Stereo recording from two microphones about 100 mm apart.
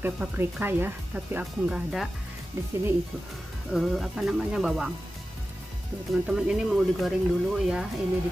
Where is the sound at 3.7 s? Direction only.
Centre (ahead or behind).